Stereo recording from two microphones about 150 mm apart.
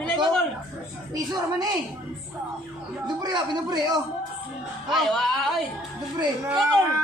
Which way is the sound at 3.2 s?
25° right (ahead or behind).